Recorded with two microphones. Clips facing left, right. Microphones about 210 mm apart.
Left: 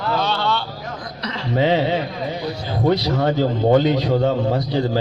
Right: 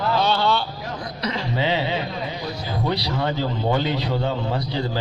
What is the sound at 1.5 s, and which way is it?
A man's voice, 45° left (ahead or behind).